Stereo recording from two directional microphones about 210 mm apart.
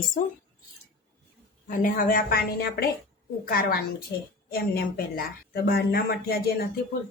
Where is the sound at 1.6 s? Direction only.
40° left (ahead or behind).